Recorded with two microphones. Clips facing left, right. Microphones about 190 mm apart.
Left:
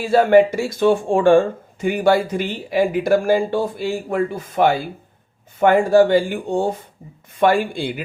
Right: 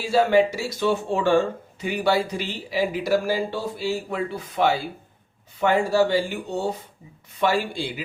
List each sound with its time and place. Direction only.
0.0 s speech: 55° left (ahead or behind)